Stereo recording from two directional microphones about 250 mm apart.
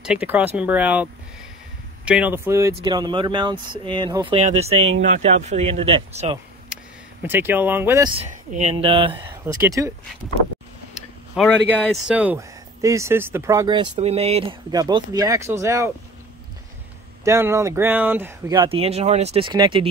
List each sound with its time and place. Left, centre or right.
0.0 s speech: centre
2.0 s speech: centre
4.4 s speech: right
7.2 s speech: centre
8.2 s speech: right
9.2 s speech: centre
11.3 s speech: centre
17.2 s speech: centre